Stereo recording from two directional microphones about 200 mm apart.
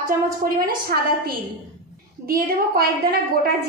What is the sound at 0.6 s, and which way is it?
Child singing, 45° right (ahead or behind).